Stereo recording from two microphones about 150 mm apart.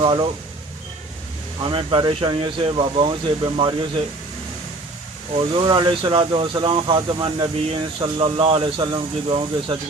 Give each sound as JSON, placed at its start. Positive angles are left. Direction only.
{"t": 0.0, "sound": "speech", "side_deg": -35}
{"t": 1.6, "sound": "speech", "side_deg": -35}
{"t": 5.3, "sound": "speech", "side_deg": -35}